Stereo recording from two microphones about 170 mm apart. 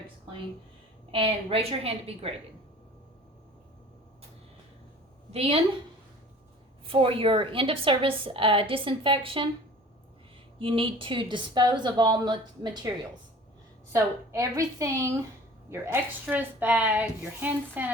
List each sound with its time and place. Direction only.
1.1 s a woman's voice: 35° right (ahead or behind)
5.3 s a woman's voice: 35° right (ahead or behind)
6.8 s a woman's voice: 35° right (ahead or behind)
10.6 s speech: 30° right (ahead or behind)
13.9 s a woman's voice: 20° right (ahead or behind)